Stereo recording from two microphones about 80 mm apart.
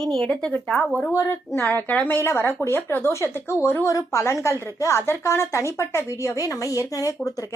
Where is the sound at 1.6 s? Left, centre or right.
Left.